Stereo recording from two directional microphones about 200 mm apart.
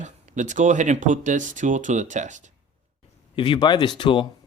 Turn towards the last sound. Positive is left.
turn(degrees=25)  # may be behind; listen again after turning